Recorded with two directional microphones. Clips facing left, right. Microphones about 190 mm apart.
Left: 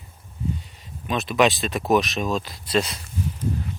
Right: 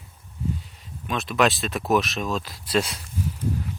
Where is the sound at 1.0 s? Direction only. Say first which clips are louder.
Left 2 dB; centre (ahead or behind).